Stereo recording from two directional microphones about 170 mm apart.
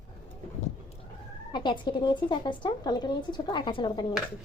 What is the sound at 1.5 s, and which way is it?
Speech, 25° left (ahead or behind).